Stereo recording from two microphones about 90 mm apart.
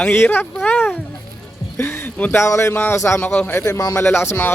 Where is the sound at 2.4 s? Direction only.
30° left (ahead or behind).